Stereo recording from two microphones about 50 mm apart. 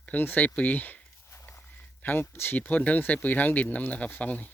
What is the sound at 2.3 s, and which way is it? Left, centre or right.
Speech, left.